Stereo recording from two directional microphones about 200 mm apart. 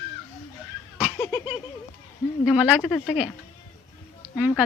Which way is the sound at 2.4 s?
10° left (ahead or behind).